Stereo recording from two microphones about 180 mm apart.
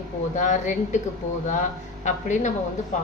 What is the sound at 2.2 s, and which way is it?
Speech, 45° left (ahead or behind).